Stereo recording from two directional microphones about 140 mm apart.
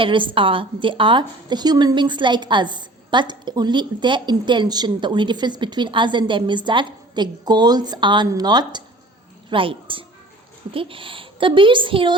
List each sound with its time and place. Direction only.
0.0 s a woman's voice: 35° right (ahead or behind)